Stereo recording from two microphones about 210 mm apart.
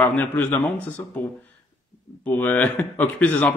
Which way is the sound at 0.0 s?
10° left (ahead or behind).